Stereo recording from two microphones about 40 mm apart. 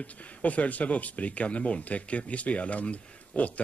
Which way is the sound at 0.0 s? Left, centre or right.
Left.